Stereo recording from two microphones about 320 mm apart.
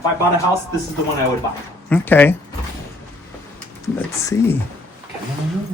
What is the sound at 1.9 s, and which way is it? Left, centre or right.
Speech, centre.